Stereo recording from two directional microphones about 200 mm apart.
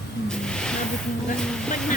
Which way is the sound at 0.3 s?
5° left (ahead or behind).